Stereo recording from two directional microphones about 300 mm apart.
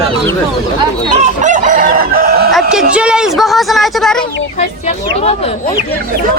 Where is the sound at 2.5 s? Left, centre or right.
Centre.